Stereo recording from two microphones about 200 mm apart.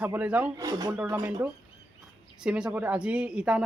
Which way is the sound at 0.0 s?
5° right (ahead or behind).